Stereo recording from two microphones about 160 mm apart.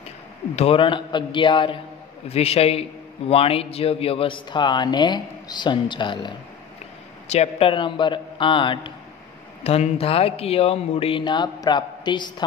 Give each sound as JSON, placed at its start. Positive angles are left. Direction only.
{"t": 0.6, "sound": "a man's voice", "side_deg": 35}
{"t": 7.2, "sound": "a man's voice", "side_deg": 40}